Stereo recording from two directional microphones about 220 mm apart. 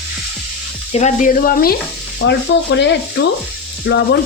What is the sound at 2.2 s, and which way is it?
Speech, 50° left (ahead or behind).